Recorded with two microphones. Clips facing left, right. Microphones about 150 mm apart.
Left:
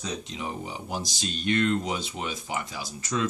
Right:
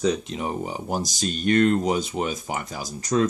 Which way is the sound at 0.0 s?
50° right (ahead or behind).